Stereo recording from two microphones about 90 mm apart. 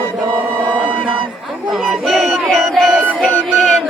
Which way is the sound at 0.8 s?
10° right (ahead or behind).